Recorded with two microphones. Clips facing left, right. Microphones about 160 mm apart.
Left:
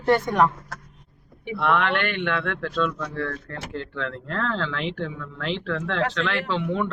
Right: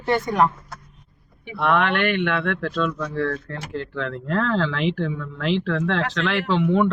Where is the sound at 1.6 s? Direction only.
Centre (ahead or behind).